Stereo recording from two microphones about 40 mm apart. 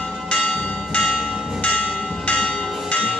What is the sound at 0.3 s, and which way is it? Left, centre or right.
Church bell, left.